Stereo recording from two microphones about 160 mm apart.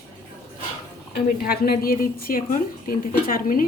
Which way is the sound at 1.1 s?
75° left (ahead or behind).